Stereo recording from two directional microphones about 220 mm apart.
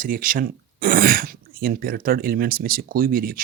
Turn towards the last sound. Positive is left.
turn(degrees=-40)  # may be behind; listen again after turning